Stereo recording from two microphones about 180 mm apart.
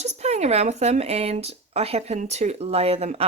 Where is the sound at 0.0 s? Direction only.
40° right (ahead or behind).